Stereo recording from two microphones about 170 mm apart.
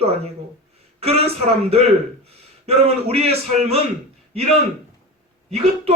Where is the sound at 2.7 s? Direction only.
35° right (ahead or behind).